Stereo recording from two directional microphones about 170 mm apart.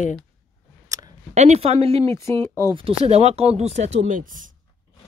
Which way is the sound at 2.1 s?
15° left (ahead or behind).